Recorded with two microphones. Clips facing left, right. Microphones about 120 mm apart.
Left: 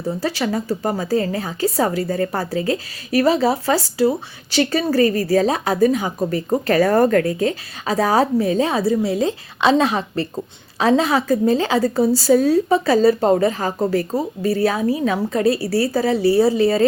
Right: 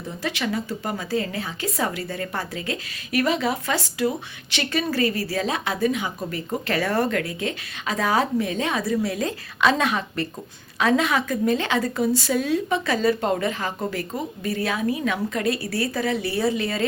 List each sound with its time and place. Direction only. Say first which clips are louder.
0.1 s a woman's voice: left 5 dB; 35° left (ahead or behind)